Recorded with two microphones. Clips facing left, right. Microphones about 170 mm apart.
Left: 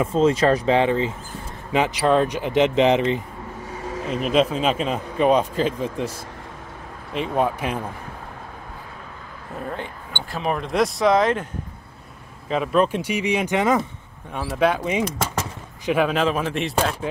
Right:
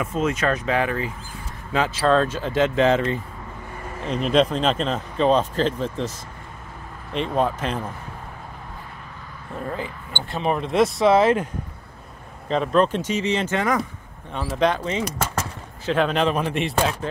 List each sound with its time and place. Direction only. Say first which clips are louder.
0.0 s speech: left 5 dB; 30° left (ahead or behind)
3.7 s vehicle: left 6 dB; 90° left
4.0 s speech: right 1 dB; 5° left (ahead or behind)
7.2 s speech: even; 10° left (ahead or behind)
9.7 s speech: right 2 dB; centre (ahead or behind)
12.4 s speech: even; 5° left (ahead or behind)
14.3 s speech: left 1 dB; 5° left (ahead or behind)